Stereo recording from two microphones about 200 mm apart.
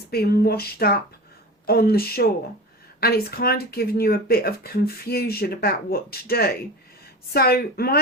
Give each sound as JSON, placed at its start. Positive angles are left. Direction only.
{"t": 0.1, "sound": "speech", "side_deg": 50}